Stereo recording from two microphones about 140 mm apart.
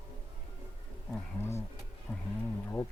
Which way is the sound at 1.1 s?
20° left (ahead or behind).